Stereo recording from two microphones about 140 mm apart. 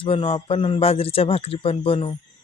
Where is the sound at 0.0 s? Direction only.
40° left (ahead or behind).